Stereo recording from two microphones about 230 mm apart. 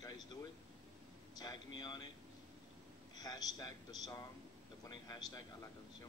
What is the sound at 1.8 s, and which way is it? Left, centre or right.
Speech, centre.